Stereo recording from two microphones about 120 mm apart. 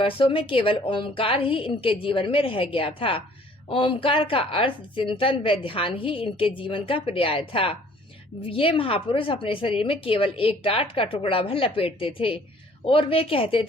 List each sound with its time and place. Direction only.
0.0 s a woman's voice: 50° left (ahead or behind)